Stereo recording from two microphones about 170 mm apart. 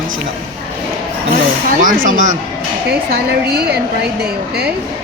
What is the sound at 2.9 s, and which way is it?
A woman's voice, 65° right (ahead or behind).